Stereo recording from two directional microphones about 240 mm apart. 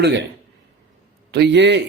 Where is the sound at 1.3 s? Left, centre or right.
Right.